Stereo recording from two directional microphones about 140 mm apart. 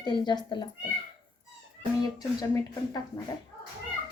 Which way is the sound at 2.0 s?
25° left (ahead or behind).